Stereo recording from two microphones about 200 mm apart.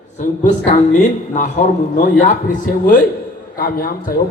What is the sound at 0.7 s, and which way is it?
A man's voice, 40° left (ahead or behind).